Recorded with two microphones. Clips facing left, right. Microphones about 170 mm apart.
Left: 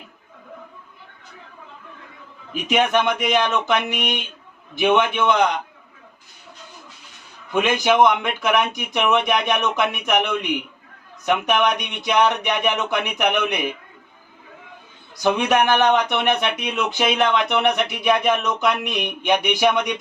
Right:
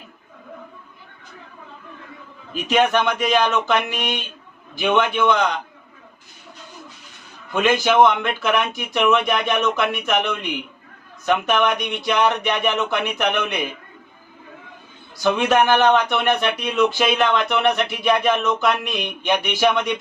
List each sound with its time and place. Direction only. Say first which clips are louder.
2.5 s speech: right 1 dB; 15° left (ahead or behind)
7.5 s speech: right 1 dB; 15° left (ahead or behind)
15.2 s speech: right 1 dB; 15° left (ahead or behind)